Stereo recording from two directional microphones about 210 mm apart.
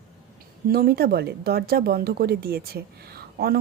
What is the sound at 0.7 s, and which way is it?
Speech, 45° right (ahead or behind).